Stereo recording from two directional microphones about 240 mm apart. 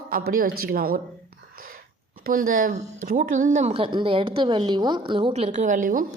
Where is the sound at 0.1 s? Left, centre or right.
Right.